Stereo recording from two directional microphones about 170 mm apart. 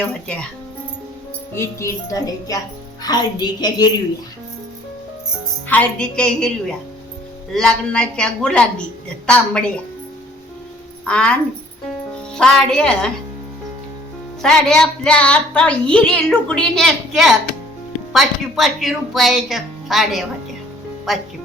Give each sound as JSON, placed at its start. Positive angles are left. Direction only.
{"t": 1.5, "sound": "speech", "side_deg": 15}
{"t": 5.6, "sound": "a woman's voice", "side_deg": 10}
{"t": 11.0, "sound": "a woman's voice", "side_deg": 5}
{"t": 14.4, "sound": "a woman's voice", "side_deg": 5}